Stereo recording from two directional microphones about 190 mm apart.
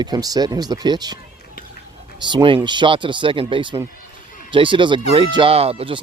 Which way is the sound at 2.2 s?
25° right (ahead or behind).